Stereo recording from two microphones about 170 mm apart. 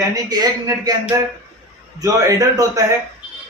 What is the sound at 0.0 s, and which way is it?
Speech, 20° right (ahead or behind).